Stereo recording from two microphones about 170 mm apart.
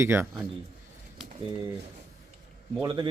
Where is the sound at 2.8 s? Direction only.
25° right (ahead or behind).